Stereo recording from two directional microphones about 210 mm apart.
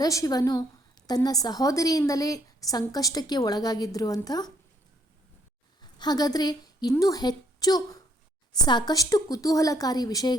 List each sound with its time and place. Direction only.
0.0 s a woman's voice: 15° left (ahead or behind)
5.8 s a woman's voice: 20° left (ahead or behind)